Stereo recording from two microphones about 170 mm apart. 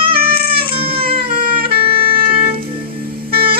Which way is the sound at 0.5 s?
30° right (ahead or behind).